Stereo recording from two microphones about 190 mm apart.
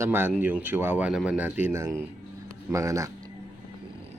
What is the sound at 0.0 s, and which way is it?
Speech, 10° right (ahead or behind).